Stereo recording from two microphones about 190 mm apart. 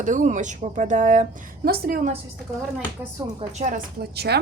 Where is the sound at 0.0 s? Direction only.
40° right (ahead or behind).